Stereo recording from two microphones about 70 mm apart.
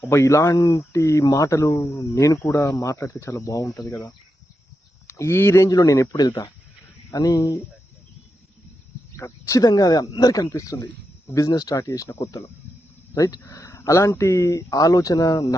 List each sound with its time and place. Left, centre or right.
0.0 s speech: left
5.0 s speech: left
5.6 s speech: left
9.1 s speech: left
11.3 s speech: left